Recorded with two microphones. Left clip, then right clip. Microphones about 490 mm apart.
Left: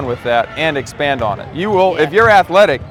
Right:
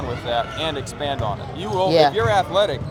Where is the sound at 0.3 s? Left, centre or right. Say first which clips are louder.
Left 8 dB; left.